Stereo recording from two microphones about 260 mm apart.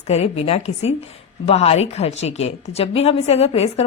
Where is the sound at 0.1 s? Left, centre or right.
Left.